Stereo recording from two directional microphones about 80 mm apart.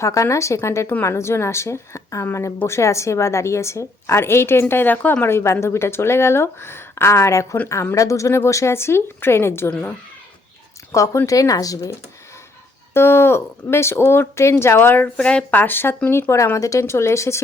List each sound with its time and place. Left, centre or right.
0.0 s speech: left
10.9 s speech: left
12.9 s speech: left